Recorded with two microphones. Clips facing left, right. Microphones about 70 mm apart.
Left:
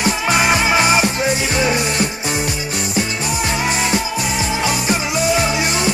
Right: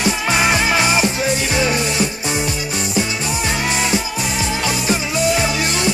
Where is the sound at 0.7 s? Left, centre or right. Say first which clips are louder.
Left 2 dB; left.